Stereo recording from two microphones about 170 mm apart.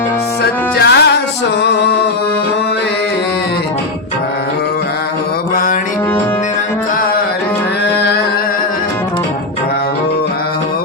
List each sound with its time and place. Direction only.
0.8 s music: 75° left (ahead or behind)